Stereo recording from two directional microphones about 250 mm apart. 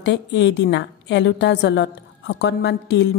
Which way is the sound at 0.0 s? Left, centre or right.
Left.